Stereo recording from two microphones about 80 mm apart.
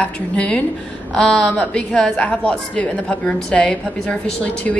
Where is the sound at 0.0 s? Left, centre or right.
Centre.